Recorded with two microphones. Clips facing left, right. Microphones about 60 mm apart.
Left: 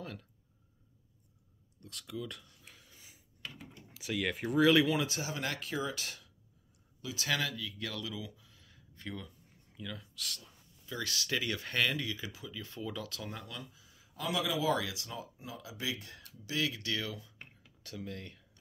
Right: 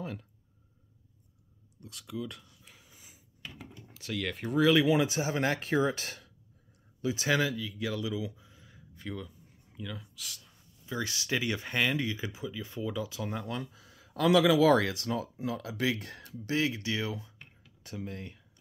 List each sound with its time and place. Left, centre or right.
0.0 s speech: centre
1.8 s a sound: centre
3.9 s speech: centre
4.8 s speech: right
5.3 s speech: right
7.2 s speech: centre
9.0 s speech: centre
10.9 s speech: right
12.0 s speech: right
13.7 s speech: right
14.8 s speech: right
16.4 s speech: right